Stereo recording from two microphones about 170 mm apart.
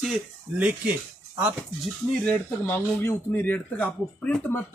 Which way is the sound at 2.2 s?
10° left (ahead or behind).